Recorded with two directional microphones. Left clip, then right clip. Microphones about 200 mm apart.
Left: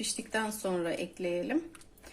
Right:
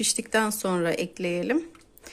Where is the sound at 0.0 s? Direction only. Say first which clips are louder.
Right 9 dB; 45° right (ahead or behind).